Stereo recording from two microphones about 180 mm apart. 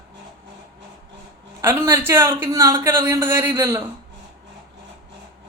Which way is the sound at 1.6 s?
15° right (ahead or behind).